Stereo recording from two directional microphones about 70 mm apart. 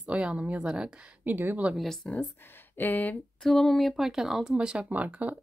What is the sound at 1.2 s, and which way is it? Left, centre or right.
Speech, right.